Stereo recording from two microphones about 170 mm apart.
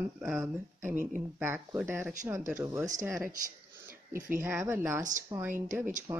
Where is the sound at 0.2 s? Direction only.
15° right (ahead or behind).